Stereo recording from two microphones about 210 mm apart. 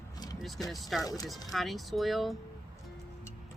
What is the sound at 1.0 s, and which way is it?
Speech, 15° left (ahead or behind).